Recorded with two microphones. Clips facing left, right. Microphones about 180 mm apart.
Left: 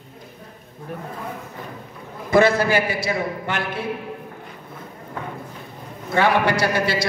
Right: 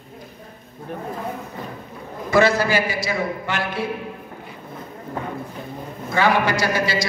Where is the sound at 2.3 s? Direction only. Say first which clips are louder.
Left 1 dB; 55° left (ahead or behind).